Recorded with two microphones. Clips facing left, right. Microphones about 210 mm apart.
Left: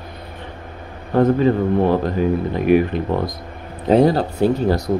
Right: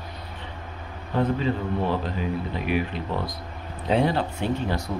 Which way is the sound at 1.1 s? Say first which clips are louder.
Left 9 dB; 50° left (ahead or behind).